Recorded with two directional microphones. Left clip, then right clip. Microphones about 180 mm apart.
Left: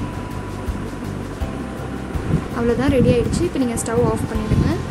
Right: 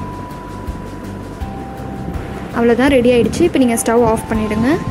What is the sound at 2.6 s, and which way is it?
A woman's voice, 25° right (ahead or behind).